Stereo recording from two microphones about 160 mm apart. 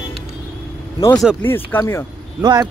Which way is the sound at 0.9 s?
20° left (ahead or behind).